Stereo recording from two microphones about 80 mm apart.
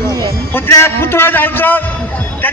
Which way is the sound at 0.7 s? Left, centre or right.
Left.